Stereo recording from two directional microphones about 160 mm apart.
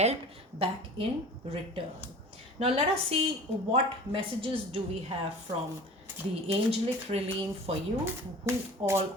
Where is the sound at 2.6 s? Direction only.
40° right (ahead or behind).